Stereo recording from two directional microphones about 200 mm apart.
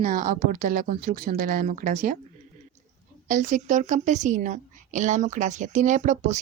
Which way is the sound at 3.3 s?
40° right (ahead or behind).